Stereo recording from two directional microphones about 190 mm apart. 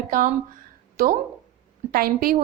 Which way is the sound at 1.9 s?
50° right (ahead or behind).